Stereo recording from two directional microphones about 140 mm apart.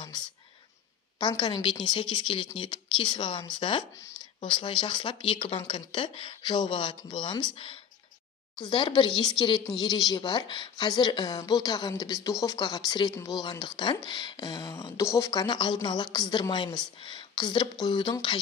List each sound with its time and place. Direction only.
1.1 s a woman's voice: 30° left (ahead or behind)